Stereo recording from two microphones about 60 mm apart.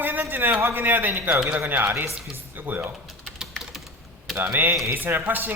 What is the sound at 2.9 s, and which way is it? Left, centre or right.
Typing, centre.